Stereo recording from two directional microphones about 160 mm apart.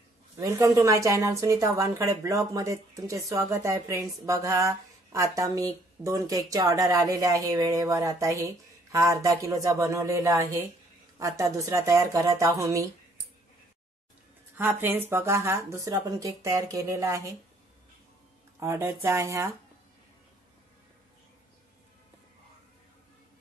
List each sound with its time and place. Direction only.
0.4 s a woman's voice: 20° right (ahead or behind)
14.6 s a woman's voice: 10° right (ahead or behind)
18.6 s speech: 15° right (ahead or behind)